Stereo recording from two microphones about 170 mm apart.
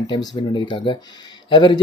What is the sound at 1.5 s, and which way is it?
Speech, 30° left (ahead or behind).